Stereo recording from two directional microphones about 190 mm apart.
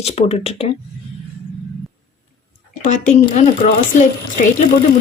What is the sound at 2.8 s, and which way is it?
Speech, 40° left (ahead or behind).